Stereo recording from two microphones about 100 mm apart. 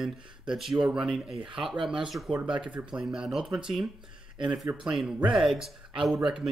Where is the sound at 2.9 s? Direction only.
5° right (ahead or behind).